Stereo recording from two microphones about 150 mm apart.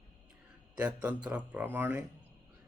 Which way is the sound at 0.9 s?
10° right (ahead or behind).